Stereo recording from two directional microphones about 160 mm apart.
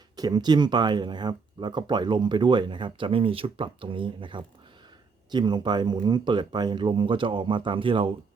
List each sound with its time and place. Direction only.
0.2 s speech: 25° right (ahead or behind)